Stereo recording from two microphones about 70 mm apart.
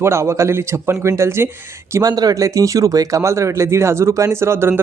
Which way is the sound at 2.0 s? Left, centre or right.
Right.